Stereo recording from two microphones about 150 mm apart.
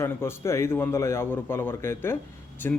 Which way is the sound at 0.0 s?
15° left (ahead or behind).